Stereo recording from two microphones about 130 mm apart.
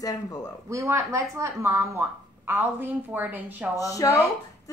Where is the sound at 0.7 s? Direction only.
20° right (ahead or behind).